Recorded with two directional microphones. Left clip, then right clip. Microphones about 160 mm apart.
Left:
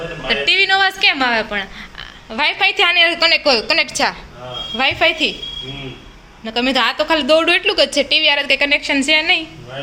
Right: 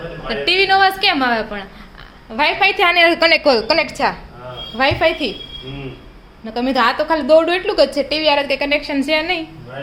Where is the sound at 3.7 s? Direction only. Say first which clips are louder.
Even; 5° right (ahead or behind).